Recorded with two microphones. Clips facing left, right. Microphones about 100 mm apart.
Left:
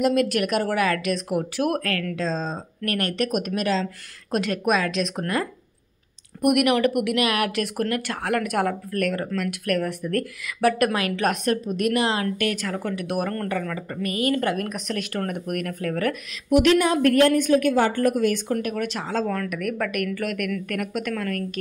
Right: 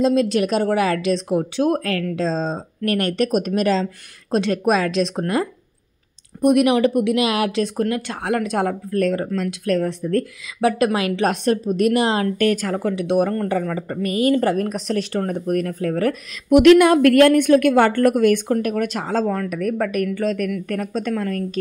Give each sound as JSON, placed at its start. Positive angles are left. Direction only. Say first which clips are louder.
{"t": 0.3, "sound": "a woman's voice", "louder": "right 4 dB", "side_deg": -25}
{"t": 16.4, "sound": "a woman's voice", "louder": "right 7 dB", "side_deg": -55}
{"t": 18.6, "sound": "speech", "louder": "right 5 dB", "side_deg": -45}
{"t": 19.5, "sound": "speech", "louder": "right 5 dB", "side_deg": -30}